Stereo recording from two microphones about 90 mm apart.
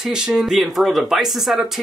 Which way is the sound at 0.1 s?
5° right (ahead or behind).